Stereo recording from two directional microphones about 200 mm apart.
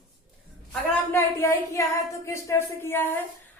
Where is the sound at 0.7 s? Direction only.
10° left (ahead or behind).